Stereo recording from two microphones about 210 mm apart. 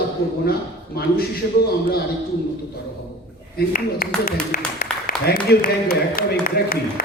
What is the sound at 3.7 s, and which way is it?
Speech, 45° left (ahead or behind).